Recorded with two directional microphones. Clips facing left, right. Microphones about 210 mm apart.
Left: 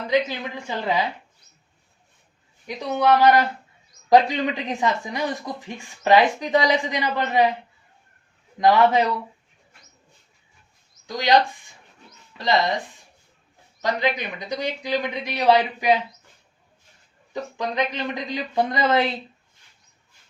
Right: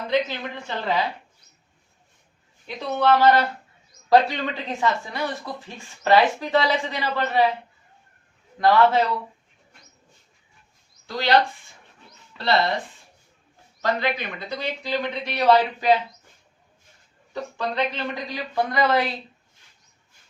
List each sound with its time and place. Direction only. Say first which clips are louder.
0.1 s speech: left 2 dB; 10° left (ahead or behind)
2.6 s speech: left 1 dB; 15° left (ahead or behind)
8.5 s speech: left 1 dB; 15° left (ahead or behind)
11.0 s speech: left 1 dB; 15° left (ahead or behind)
13.8 s speech: left 1 dB; 15° left (ahead or behind)
17.6 s speech: even; 15° left (ahead or behind)